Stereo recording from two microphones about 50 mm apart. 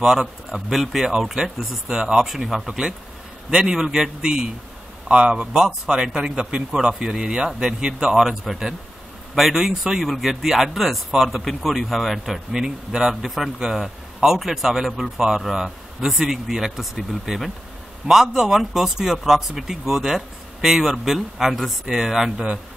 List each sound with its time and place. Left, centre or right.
0.5 s a man's voice: centre; by 5.5 s right
5.5 s a man's voice: centre